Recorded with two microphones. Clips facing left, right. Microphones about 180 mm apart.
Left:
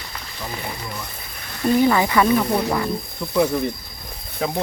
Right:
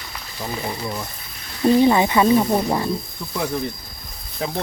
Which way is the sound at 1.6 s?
25° right (ahead or behind).